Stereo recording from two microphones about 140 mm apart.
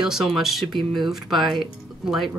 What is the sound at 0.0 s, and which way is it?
Speech, 5° right (ahead or behind).